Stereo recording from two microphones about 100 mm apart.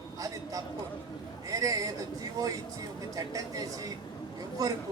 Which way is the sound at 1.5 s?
35° right (ahead or behind).